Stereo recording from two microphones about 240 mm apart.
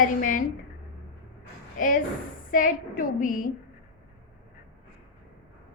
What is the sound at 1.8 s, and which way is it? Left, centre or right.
A woman's voice, left.